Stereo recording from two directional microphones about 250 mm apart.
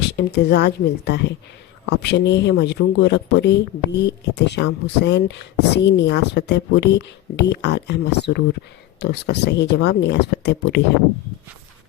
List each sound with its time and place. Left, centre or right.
0.1 s speech: left